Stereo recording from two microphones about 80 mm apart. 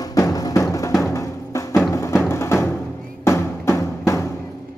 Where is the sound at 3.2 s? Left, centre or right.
Left.